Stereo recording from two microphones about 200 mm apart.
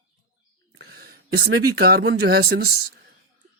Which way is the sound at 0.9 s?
50° right (ahead or behind).